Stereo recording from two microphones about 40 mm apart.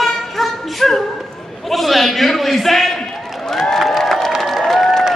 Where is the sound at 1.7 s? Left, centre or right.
Centre.